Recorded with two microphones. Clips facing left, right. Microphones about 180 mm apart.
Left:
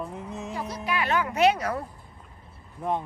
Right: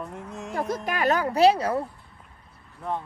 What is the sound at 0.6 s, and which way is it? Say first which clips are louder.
A woman's voice: right 4 dB; 50° right (ahead or behind).